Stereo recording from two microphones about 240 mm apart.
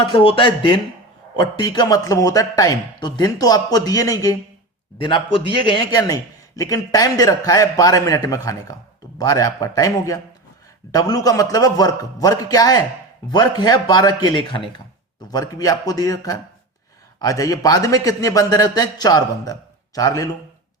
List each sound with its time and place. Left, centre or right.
0.0 s a man's voice: left